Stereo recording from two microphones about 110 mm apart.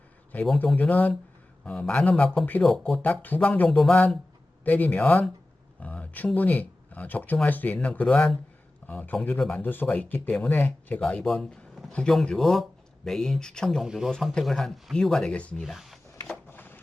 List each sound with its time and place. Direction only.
0.3 s speech: 15° left (ahead or behind)
11.0 s speech: 5° left (ahead or behind)
13.8 s speech: 5° right (ahead or behind); by 15.6 s 10° left (ahead or behind)
15.6 s speech: centre (ahead or behind)
16.5 s crushing: 15° left (ahead or behind)